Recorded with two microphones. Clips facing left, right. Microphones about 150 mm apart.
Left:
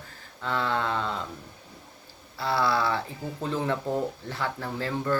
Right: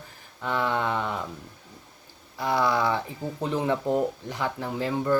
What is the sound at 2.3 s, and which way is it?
Speech, 15° right (ahead or behind).